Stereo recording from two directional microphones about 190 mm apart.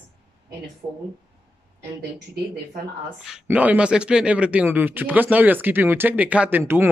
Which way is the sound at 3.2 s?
5° right (ahead or behind).